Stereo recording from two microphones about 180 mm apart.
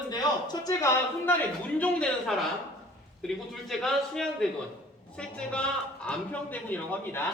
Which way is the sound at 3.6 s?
Centre (ahead or behind).